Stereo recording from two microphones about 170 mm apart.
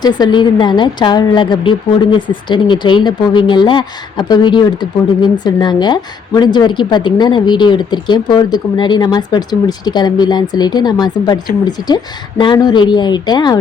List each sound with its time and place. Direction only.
0.0 s speech: 25° left (ahead or behind)
12.4 s speech: 25° left (ahead or behind)